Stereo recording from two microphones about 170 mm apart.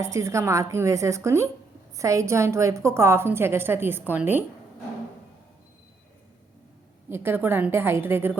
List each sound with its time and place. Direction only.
0.0 s a woman's voice: 15° right (ahead or behind)
7.1 s a woman's voice: 15° right (ahead or behind)